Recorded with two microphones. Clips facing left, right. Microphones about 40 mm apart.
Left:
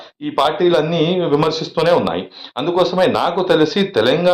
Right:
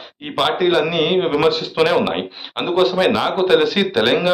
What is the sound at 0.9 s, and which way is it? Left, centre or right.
A man's voice, right.